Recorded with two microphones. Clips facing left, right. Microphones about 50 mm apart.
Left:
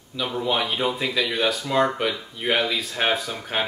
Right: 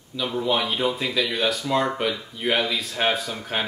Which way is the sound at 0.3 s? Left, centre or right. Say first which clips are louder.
Right 1 dB; centre.